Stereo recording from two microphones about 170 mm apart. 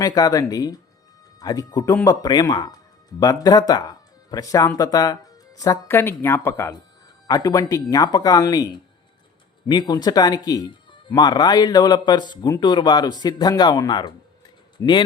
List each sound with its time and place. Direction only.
0.0 s speech: 20° left (ahead or behind)